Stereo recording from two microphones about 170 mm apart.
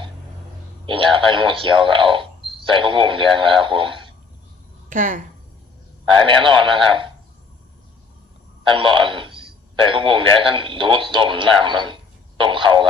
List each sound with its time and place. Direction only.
0.9 s a man's voice: 30° right (ahead or behind)
4.9 s speech: 50° right (ahead or behind)
6.2 s speech: 30° right (ahead or behind)
8.6 s speech: 30° right (ahead or behind)
12.5 s radio: 30° right (ahead or behind)